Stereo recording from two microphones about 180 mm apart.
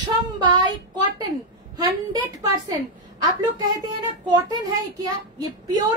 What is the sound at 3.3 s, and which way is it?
A child's voice, 25° right (ahead or behind).